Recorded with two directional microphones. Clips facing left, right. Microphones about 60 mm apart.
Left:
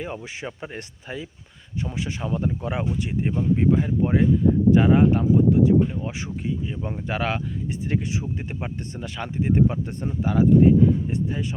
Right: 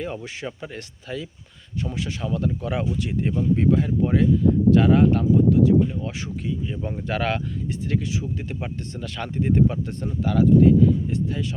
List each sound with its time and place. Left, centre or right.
0.4 s speech: left
7.9 s speech: left